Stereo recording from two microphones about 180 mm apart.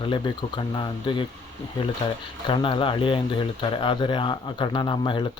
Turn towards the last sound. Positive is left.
turn(degrees=25)  # may be behind; listen again after turning